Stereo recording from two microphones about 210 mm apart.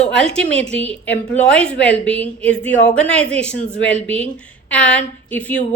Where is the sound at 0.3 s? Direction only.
5° left (ahead or behind).